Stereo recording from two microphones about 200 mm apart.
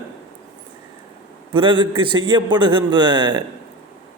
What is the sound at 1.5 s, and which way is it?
A man's voice, 25° right (ahead or behind).